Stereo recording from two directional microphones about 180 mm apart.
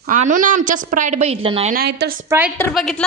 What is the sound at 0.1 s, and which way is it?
A woman's voice, 45° right (ahead or behind).